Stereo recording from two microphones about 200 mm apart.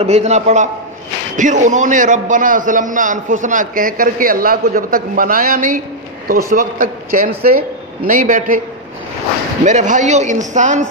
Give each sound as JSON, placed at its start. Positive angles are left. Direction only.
{"t": 0.0, "sound": "a man's voice", "side_deg": -35}
{"t": 9.7, "sound": "a man's voice", "side_deg": -40}